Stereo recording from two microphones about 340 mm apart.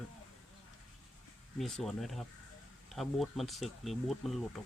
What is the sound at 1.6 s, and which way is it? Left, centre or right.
Speech, centre.